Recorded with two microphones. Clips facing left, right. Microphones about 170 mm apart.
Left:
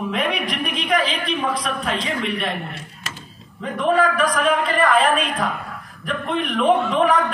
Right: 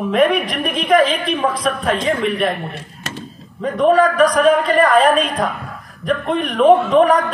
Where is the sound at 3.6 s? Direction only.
40° right (ahead or behind).